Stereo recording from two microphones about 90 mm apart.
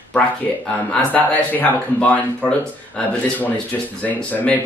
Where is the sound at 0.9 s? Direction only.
20° left (ahead or behind).